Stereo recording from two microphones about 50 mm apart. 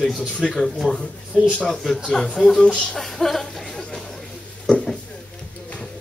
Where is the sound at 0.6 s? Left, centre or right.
Centre.